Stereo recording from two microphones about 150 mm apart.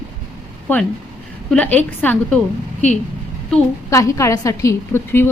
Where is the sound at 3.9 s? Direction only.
20° left (ahead or behind).